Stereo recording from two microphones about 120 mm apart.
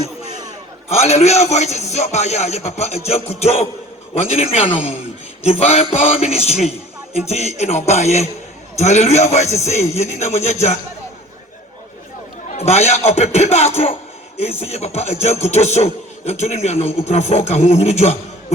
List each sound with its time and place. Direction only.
0.0 s a sound: 60° left (ahead or behind)
0.9 s a man's voice: 65° left (ahead or behind)
12.5 s a man's voice: 65° left (ahead or behind)